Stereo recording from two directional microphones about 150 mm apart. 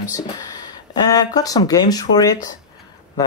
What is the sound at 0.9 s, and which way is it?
Speech, 25° left (ahead or behind).